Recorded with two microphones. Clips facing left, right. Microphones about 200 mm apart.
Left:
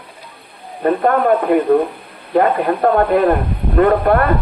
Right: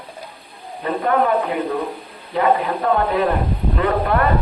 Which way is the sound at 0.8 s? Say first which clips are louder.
Left 5 dB; 55° left (ahead or behind).